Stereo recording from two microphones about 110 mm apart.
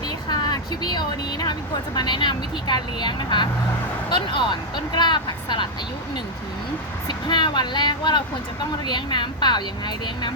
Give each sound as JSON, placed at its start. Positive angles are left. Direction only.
{"t": 0.3, "sound": "speech", "side_deg": 40}
{"t": 7.1, "sound": "a woman's voice", "side_deg": 45}